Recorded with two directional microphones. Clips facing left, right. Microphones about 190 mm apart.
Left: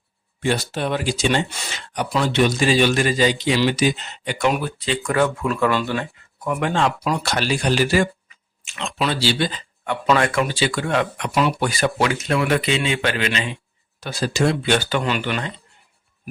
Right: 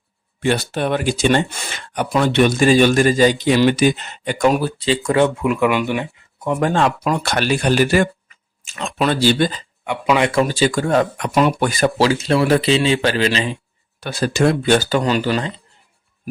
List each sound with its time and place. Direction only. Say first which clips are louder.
0.3 s speech: right 3 dB; 60° right (ahead or behind); by 6.6 s 20° right (ahead or behind)
6.6 s speech: right 4 dB; 50° right (ahead or behind)
8.6 s speech: right 4 dB; 40° right (ahead or behind)
9.8 s speech: right 2 dB; 10° right (ahead or behind)
10.3 s a man's voice: right 5 dB; 40° right (ahead or behind)
11.3 s speech: right 4 dB; 50° right (ahead or behind)
11.9 s a man's voice: right 5 dB; 30° right (ahead or behind)
14.0 s a man's voice: right 4 dB; 60° right (ahead or behind); by 15.6 s 35° right (ahead or behind)